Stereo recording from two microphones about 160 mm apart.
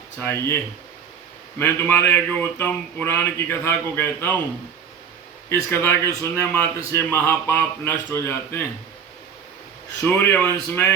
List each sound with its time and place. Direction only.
0.2 s a man's voice: 15° left (ahead or behind)
5.5 s a man's voice: 15° left (ahead or behind)
10.0 s a man's voice: 15° left (ahead or behind)